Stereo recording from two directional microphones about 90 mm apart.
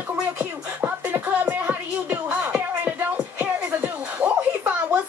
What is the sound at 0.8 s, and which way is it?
Music, 20° right (ahead or behind).